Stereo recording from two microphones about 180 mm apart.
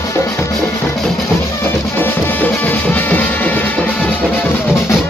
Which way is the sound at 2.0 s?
10° left (ahead or behind).